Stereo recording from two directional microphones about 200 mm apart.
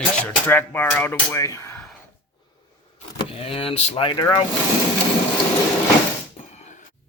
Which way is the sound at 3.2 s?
30° left (ahead or behind).